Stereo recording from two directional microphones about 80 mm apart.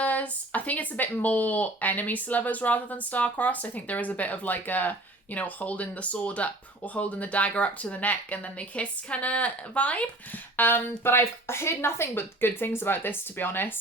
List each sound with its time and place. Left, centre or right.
0.0 s speech: centre